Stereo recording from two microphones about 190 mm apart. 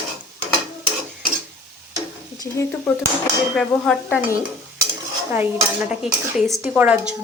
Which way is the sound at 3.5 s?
5° left (ahead or behind).